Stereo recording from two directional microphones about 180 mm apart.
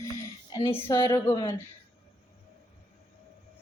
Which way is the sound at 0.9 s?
25° left (ahead or behind).